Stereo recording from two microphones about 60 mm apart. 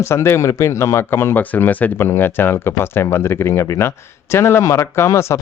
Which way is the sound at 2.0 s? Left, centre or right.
Left.